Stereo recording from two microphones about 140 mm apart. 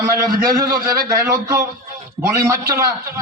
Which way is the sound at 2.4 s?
20° right (ahead or behind).